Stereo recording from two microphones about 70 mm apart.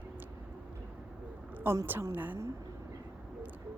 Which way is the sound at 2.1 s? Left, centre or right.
Right.